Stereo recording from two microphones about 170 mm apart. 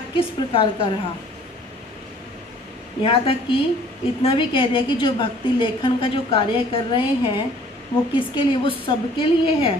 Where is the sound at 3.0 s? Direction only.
35° left (ahead or behind).